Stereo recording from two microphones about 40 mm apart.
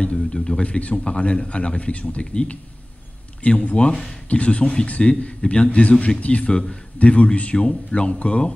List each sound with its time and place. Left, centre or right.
0.2 s speech: centre
0.7 s a man's voice: left